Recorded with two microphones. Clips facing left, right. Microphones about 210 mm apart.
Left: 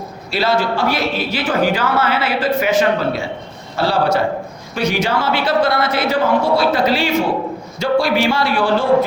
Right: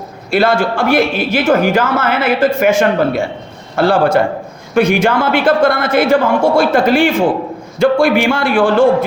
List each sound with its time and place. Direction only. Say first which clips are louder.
0.3 s a man's voice: right 5 dB; 50° right (ahead or behind)